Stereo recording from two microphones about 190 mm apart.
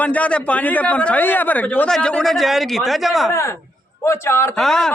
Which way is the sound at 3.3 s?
15° left (ahead or behind).